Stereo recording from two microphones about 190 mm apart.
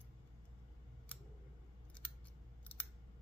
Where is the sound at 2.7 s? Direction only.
10° left (ahead or behind).